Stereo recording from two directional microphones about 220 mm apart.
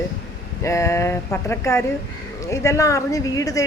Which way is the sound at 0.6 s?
15° left (ahead or behind).